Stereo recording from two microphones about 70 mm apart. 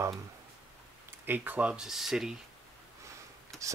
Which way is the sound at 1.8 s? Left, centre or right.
Centre.